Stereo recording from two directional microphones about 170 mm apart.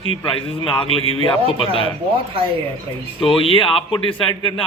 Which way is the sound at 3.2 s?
30° left (ahead or behind).